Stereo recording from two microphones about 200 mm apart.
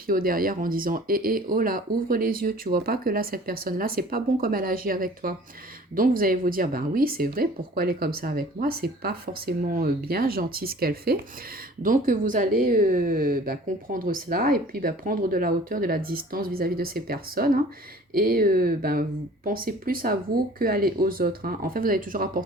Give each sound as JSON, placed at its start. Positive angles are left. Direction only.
{"t": 0.1, "sound": "speech", "side_deg": -45}